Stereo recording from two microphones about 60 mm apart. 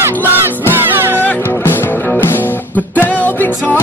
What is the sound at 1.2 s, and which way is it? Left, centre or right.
Music, left.